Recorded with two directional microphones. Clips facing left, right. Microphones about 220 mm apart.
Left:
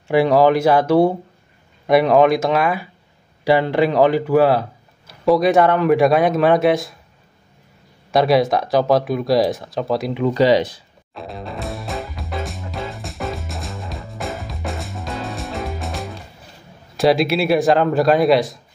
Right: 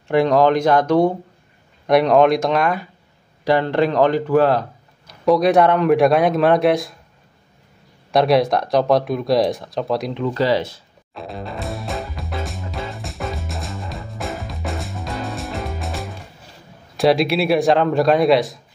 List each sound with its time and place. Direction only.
0.1 s speech: 5° left (ahead or behind)
8.1 s speech: centre (ahead or behind)
10.2 s speech: 15° left (ahead or behind)
11.1 s music: centre (ahead or behind)
16.9 s speech: centre (ahead or behind)